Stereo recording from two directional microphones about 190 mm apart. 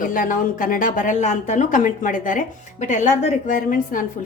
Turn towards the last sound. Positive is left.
turn(degrees=45)  # may be behind; listen again after turning